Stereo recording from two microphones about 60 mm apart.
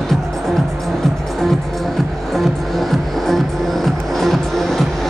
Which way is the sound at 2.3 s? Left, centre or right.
Centre.